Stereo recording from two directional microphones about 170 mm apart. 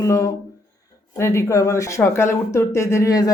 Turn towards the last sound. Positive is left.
turn(degrees=20)  # may be behind; listen again after turning